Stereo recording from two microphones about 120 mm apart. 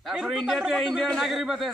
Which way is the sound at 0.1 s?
5° right (ahead or behind).